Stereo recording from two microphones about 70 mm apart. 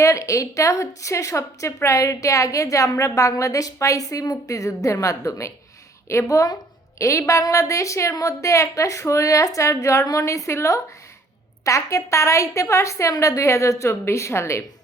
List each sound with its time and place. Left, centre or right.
0.0 s a woman's voice: left
7.0 s a woman's voice: left